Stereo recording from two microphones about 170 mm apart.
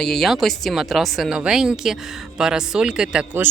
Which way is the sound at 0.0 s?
Centre (ahead or behind).